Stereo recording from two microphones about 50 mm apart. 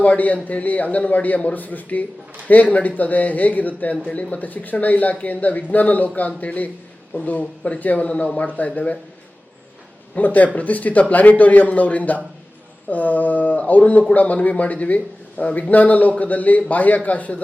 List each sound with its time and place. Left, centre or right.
0.0 s a man's voice: left
10.2 s a man's voice: left